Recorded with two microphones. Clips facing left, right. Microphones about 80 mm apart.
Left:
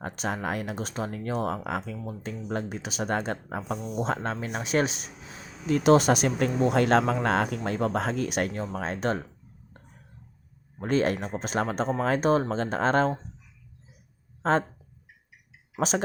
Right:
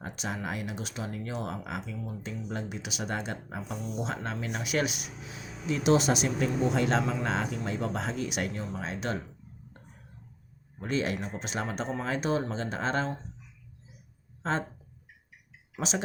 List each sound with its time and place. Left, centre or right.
0.0 s speech: left
5.6 s speech: left
10.8 s speech: left